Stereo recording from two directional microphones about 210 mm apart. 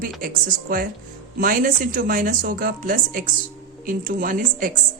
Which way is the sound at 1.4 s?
40° right (ahead or behind).